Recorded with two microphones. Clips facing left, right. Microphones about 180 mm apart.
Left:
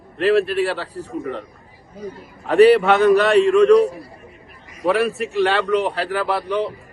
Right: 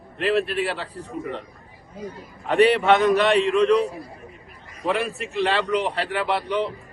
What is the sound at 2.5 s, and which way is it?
Speech, 35° left (ahead or behind).